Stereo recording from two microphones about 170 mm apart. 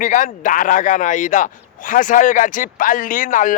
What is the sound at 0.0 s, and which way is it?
A man's voice, 50° left (ahead or behind).